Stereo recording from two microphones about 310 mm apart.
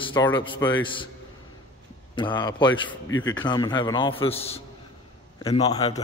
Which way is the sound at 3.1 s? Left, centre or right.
Left.